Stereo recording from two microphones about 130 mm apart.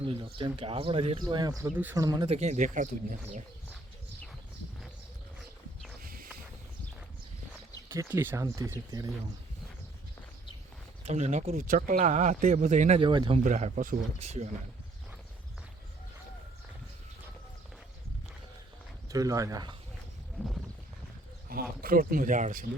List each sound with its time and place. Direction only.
0.0 s speech: 40° right (ahead or behind)
1.3 s speech: 30° right (ahead or behind)
1.6 s speech: 15° right (ahead or behind)
2.0 s speech: 30° right (ahead or behind)
2.2 s speech: 55° right (ahead or behind); by 3.4 s 85° right
6.0 s a sound: 90° right
7.9 s speech: 20° right (ahead or behind)
11.1 s speech: 60° right (ahead or behind)
13.0 s speech: 40° right (ahead or behind)
13.4 s speech: 70° right (ahead or behind)
19.1 s speech: 25° right (ahead or behind)
21.8 s speech: 90° right